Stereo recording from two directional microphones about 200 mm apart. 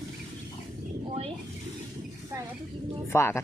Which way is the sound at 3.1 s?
15° left (ahead or behind).